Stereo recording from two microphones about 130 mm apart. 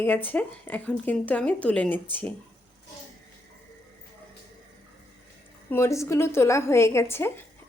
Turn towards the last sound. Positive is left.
turn(degrees=20)  # may be behind; listen again after turning